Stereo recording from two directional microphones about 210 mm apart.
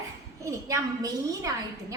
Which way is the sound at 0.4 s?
15° right (ahead or behind).